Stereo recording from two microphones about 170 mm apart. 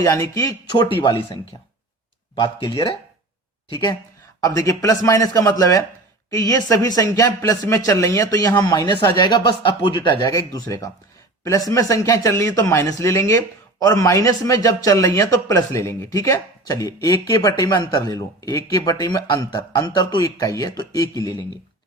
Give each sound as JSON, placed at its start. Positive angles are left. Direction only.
{"t": 0.0, "sound": "speech", "side_deg": 20}